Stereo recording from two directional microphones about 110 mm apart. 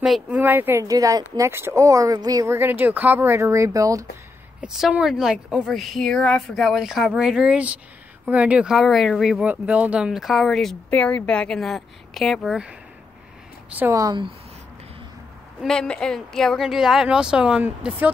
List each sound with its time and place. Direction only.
0.0 s a woman's voice: 5° right (ahead or behind)
0.4 s speech: 20° right (ahead or behind)
0.8 s speech: 30° right (ahead or behind)
2.5 s speech: 20° right (ahead or behind)
4.6 s a woman's voice: 5° right (ahead or behind)
9.5 s a woman's voice: 15° right (ahead or behind); by 10.8 s 5° left (ahead or behind)
10.9 s a woman's voice: 15° left (ahead or behind); by 12.7 s 5° right (ahead or behind)
13.7 s speech: 15° right (ahead or behind)
13.9 s speech: 35° right (ahead or behind)
15.6 s a woman's voice: 5° left (ahead or behind); by 18.1 s 15° right (ahead or behind)